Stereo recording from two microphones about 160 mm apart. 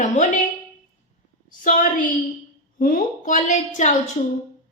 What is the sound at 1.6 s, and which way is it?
A woman's voice, 55° left (ahead or behind).